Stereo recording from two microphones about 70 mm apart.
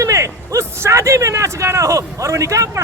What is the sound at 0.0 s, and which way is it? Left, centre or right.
Speech, right.